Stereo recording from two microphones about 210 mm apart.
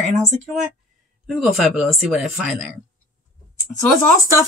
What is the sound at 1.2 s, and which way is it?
Speech, centre (ahead or behind).